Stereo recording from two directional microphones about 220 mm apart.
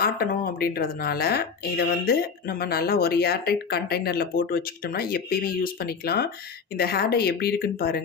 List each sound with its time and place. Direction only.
0.0 s speech: 45° left (ahead or behind)